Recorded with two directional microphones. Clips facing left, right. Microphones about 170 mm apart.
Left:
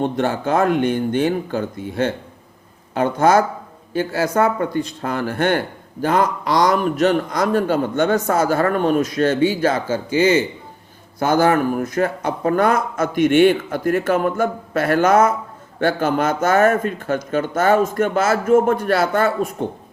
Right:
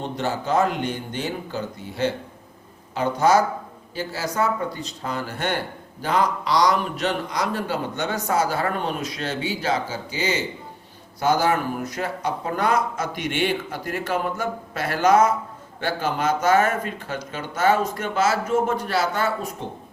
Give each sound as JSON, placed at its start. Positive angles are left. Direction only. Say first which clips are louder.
{"t": 0.0, "sound": "speech", "louder": "left 7 dB", "side_deg": 55}